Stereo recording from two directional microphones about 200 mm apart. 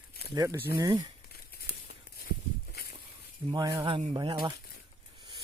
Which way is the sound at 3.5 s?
20° right (ahead or behind).